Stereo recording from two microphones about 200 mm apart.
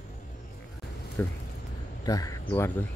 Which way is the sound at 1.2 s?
10° left (ahead or behind).